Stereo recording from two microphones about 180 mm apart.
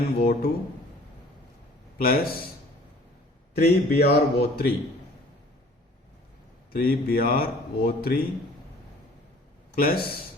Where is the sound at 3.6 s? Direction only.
60° left (ahead or behind).